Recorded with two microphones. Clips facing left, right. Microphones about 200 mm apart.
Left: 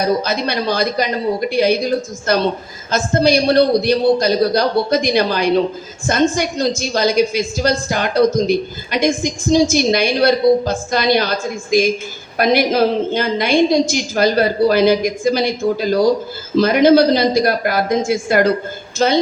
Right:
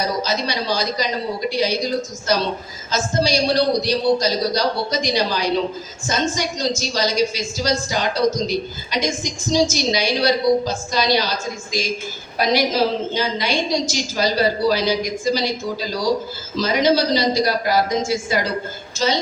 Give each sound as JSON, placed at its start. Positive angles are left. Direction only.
{"t": 0.0, "sound": "a woman's voice", "side_deg": 55}